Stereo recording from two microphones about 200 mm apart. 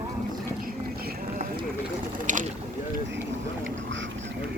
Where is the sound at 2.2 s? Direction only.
40° right (ahead or behind).